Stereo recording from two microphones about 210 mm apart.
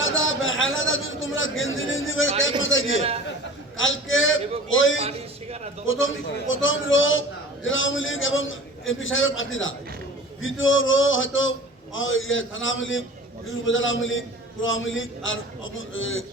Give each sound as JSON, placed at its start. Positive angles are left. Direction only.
{"t": 0.0, "sound": "a man's voice", "side_deg": 70}
{"t": 4.9, "sound": "a sound", "side_deg": -30}
{"t": 5.8, "sound": "a man's voice", "side_deg": 70}